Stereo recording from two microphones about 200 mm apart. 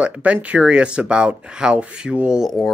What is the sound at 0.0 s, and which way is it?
Speech, 5° right (ahead or behind).